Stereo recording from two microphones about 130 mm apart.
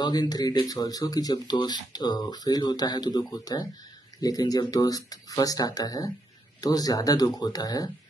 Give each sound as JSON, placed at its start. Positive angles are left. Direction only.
{"t": 0.0, "sound": "speech", "side_deg": 30}